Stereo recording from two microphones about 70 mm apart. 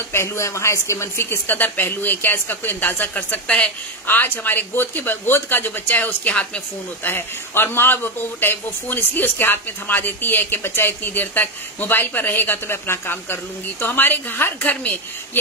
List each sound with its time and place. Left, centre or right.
0.1 s speech: left; by 3.7 s centre
4.1 s speech: left
7.0 s a man's voice: left